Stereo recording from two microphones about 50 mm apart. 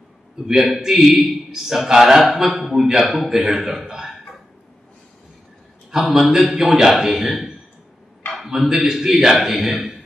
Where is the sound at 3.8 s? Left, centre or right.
Centre.